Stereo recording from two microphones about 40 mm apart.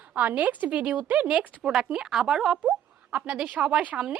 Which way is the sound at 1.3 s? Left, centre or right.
Right.